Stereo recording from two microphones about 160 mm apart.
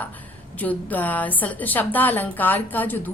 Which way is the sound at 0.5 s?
10° left (ahead or behind).